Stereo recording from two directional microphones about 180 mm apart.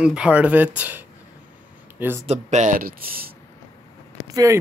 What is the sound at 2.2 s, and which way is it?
Speech, 40° right (ahead or behind).